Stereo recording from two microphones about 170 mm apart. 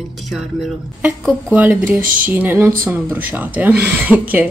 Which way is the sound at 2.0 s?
55° right (ahead or behind).